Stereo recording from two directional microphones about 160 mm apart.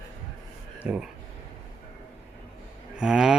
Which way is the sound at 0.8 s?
5° right (ahead or behind).